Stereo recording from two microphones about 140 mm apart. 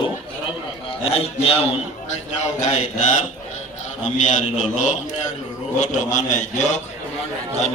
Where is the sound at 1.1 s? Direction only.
45° left (ahead or behind).